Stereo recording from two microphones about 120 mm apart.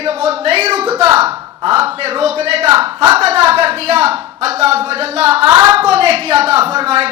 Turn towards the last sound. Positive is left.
turn(degrees=-60)  # may be behind; listen again after turning